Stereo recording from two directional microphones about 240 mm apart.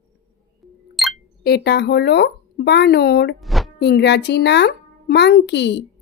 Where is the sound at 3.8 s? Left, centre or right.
Left.